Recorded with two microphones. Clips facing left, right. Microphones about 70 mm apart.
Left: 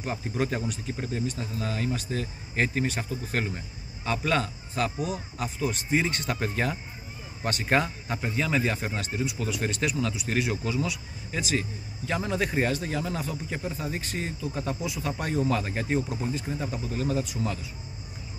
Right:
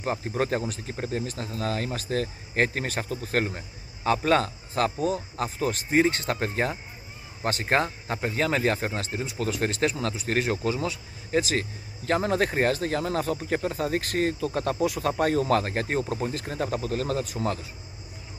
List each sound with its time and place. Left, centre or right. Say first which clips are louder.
0.0 s speech: right 2 dB; right
1.4 s speech: right 2 dB; right
6.2 s speech: right 2 dB; right
8.3 s speech: right 3 dB; right